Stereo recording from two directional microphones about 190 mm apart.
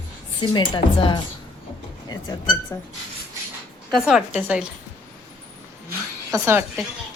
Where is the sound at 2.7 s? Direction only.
15° left (ahead or behind).